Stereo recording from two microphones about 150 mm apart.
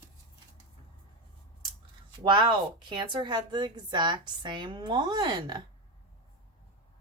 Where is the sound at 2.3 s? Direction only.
30° right (ahead or behind).